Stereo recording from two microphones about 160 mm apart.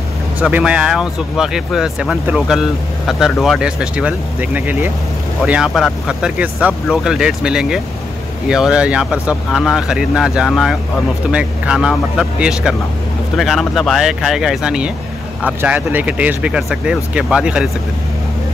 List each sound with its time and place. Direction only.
0.4 s speech: 10° right (ahead or behind)